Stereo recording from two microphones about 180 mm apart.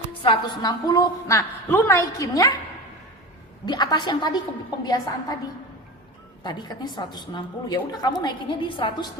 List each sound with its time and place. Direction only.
0.2 s a woman's voice: 25° left (ahead or behind)
3.7 s a woman's voice: 25° left (ahead or behind)
6.4 s a woman's voice: 25° left (ahead or behind)